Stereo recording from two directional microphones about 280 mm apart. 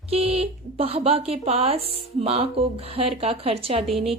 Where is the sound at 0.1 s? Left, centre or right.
Right.